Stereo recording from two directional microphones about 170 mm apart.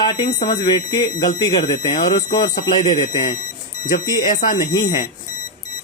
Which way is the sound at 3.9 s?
55° left (ahead or behind).